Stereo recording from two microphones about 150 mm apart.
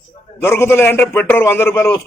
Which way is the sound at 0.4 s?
15° left (ahead or behind).